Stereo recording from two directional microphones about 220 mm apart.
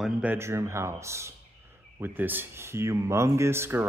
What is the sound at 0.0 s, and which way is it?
Speech, 5° right (ahead or behind).